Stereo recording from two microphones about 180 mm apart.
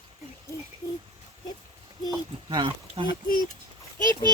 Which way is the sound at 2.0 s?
25° right (ahead or behind).